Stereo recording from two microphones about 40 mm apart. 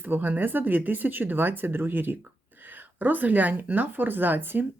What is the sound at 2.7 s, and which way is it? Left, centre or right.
Speech, right.